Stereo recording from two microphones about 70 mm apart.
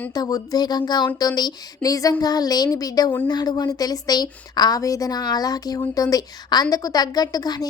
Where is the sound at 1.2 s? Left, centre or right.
Left.